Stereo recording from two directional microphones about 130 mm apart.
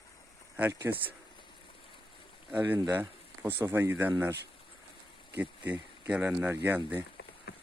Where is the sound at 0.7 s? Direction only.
20° right (ahead or behind).